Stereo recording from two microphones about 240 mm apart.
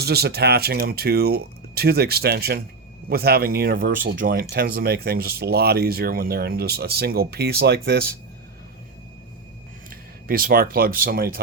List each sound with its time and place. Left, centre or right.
0.0 s speech: right
10.2 s speech: right